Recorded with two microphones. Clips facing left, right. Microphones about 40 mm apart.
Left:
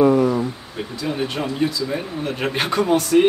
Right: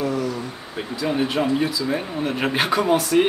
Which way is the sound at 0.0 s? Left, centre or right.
Left.